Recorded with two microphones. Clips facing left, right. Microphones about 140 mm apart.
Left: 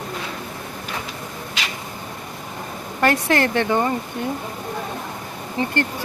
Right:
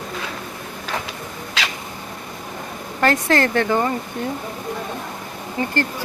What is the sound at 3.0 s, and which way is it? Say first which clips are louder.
Speech: right 1 dB; 15° left (ahead or behind).